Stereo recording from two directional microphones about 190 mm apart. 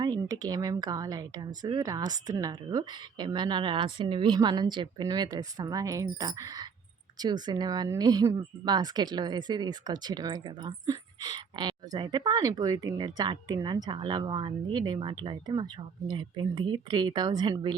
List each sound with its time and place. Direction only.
0.0 s speech: 20° right (ahead or behind)